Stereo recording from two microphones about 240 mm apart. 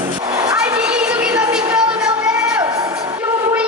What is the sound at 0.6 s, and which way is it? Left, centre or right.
Music, centre.